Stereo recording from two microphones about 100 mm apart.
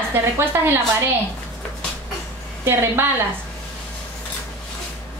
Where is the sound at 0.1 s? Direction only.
25° right (ahead or behind).